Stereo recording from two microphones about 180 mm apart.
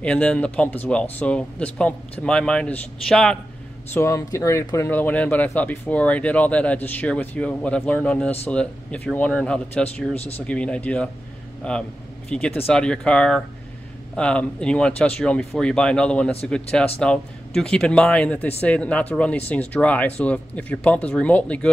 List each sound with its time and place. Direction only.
0.0 s speech: 5° left (ahead or behind)
3.9 s speech: 15° left (ahead or behind)
10.1 s speech: 35° left (ahead or behind)
10.4 s speech: 5° left (ahead or behind)